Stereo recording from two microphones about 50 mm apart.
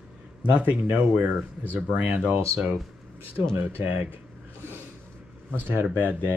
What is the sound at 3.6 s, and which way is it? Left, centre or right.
Speech, right.